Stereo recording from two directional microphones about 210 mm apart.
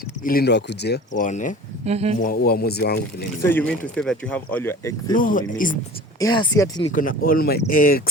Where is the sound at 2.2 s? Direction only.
45° left (ahead or behind).